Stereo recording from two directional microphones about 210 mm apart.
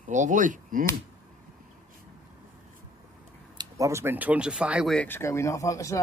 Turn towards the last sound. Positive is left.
turn(degrees=15)  # may be behind; listen again after turning